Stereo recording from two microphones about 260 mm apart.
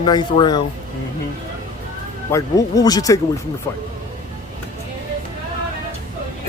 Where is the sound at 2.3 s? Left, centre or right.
Centre.